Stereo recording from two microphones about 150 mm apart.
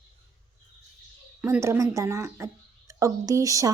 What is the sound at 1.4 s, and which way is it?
A woman's voice, 15° right (ahead or behind).